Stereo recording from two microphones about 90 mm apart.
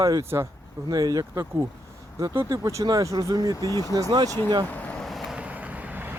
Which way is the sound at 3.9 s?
40° right (ahead or behind).